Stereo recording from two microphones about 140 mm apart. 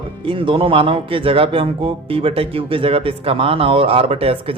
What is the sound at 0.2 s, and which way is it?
Speech, 40° right (ahead or behind).